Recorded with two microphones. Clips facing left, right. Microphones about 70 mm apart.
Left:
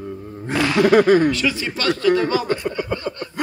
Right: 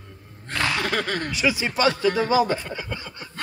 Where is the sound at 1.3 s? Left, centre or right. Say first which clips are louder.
Even; centre.